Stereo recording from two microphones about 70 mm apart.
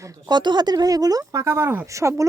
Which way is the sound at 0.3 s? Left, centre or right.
Right.